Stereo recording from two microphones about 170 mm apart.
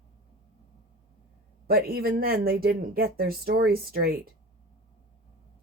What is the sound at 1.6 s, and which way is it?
A woman's voice, 60° right (ahead or behind).